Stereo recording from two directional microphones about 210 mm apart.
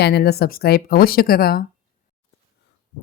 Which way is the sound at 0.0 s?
50° left (ahead or behind).